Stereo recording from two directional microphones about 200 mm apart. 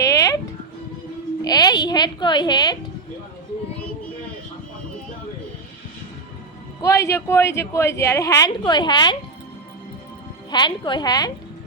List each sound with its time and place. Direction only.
0.0 s music: 15° left (ahead or behind)
1.5 s a woman's voice: 20° left (ahead or behind)
6.8 s a woman's voice: 15° left (ahead or behind)
10.5 s a woman's voice: 20° left (ahead or behind)